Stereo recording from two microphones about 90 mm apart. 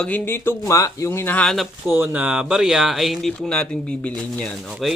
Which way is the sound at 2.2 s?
10° right (ahead or behind).